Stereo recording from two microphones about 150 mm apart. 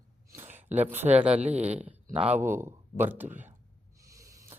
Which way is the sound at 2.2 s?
50° right (ahead or behind).